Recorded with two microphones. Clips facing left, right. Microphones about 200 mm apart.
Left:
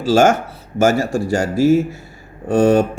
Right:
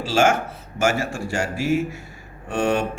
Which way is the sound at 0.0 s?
40° left (ahead or behind).